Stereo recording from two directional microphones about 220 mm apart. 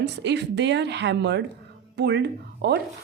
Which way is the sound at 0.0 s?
50° right (ahead or behind).